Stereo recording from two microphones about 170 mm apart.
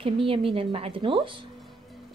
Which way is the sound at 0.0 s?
30° right (ahead or behind).